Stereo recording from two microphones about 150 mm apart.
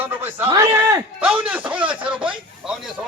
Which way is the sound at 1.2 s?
10° right (ahead or behind).